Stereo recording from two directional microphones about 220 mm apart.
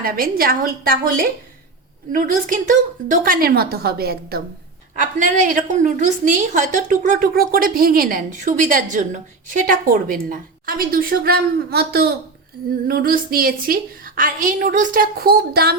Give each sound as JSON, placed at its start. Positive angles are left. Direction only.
{"t": 0.0, "sound": "a woman's voice", "side_deg": -40}